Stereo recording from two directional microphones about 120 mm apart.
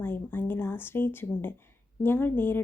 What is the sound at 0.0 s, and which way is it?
A woman's voice, 20° left (ahead or behind).